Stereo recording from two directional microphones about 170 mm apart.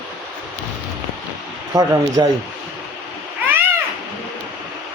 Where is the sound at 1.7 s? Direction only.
20° right (ahead or behind).